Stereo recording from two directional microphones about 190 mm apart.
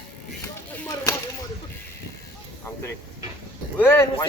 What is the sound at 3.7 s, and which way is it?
Speech, 10° left (ahead or behind).